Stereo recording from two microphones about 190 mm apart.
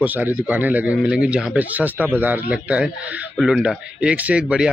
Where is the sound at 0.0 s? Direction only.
10° right (ahead or behind).